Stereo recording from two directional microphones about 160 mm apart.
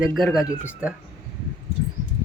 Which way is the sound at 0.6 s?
10° right (ahead or behind).